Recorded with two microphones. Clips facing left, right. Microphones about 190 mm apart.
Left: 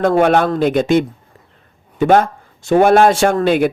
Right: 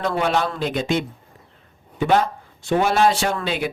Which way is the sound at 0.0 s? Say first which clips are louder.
Left 9 dB; 50° left (ahead or behind).